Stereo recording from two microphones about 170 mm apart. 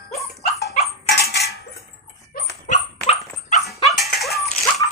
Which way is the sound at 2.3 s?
65° left (ahead or behind).